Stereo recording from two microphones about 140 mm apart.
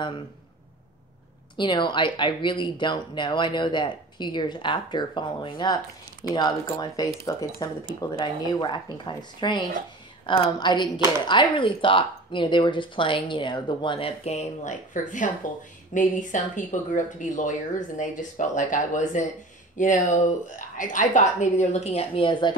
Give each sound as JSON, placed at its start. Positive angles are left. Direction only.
{"t": 1.6, "sound": "speech", "side_deg": 35}